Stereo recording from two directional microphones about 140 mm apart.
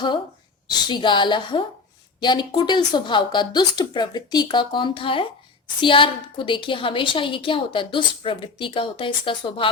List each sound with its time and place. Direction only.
0.7 s a woman's voice: 30° left (ahead or behind)